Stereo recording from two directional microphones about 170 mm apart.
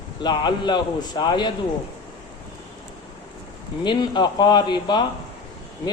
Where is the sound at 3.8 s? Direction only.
25° left (ahead or behind).